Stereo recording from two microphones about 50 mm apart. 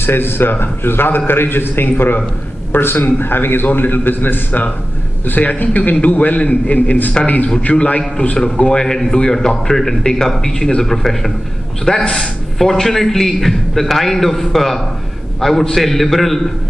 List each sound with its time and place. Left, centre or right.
0.0 s a man's voice: left; by 16.3 s centre